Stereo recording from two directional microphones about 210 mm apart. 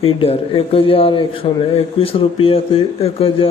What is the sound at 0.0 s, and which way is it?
A man's voice, 25° left (ahead or behind).